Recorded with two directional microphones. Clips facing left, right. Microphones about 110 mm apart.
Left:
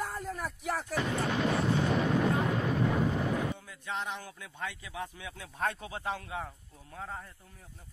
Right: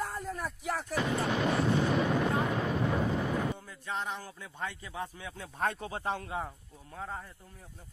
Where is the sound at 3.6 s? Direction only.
Centre (ahead or behind).